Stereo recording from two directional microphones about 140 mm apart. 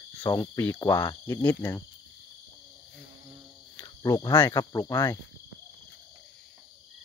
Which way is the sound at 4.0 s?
30° left (ahead or behind).